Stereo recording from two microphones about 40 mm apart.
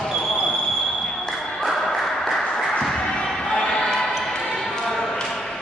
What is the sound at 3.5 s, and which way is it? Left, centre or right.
Choir, left.